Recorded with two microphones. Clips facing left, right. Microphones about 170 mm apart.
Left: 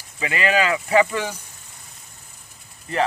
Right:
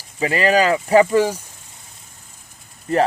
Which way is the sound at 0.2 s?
35° right (ahead or behind).